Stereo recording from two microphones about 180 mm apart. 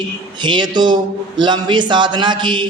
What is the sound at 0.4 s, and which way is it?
A man's voice, 25° right (ahead or behind).